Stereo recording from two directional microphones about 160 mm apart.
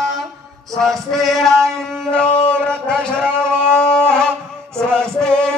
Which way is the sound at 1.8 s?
5° left (ahead or behind).